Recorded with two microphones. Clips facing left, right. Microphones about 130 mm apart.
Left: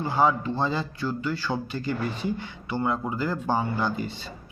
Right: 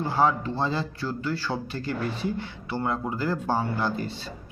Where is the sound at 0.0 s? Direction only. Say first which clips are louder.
Even; centre (ahead or behind).